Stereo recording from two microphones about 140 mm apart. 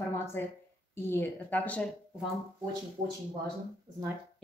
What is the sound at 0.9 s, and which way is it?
Speech, 15° left (ahead or behind).